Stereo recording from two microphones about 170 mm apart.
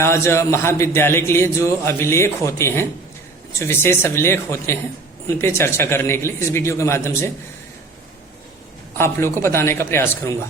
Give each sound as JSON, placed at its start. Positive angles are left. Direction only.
{"t": 0.0, "sound": "speech", "side_deg": 15}
{"t": 9.0, "sound": "speech", "side_deg": 15}